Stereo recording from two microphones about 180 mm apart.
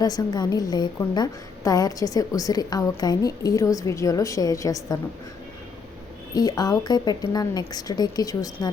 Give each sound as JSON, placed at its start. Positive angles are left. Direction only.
{"t": 0.0, "sound": "a woman's voice", "side_deg": 20}
{"t": 6.3, "sound": "a woman's voice", "side_deg": 20}